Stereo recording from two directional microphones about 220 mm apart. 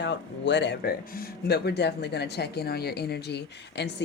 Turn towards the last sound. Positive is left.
turn(degrees=50)  # may be behind; listen again after turning